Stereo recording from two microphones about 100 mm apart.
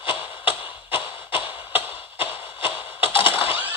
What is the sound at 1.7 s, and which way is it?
Music, 20° right (ahead or behind).